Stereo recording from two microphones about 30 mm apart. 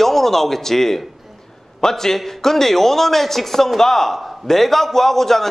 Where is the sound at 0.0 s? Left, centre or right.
Centre.